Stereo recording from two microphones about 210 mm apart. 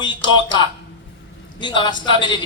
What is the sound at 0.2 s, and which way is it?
A man's voice, 20° left (ahead or behind).